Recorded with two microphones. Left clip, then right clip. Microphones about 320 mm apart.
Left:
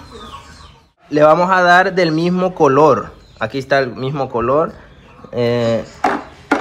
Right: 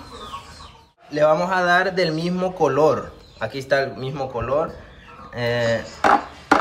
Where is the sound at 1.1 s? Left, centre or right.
Centre.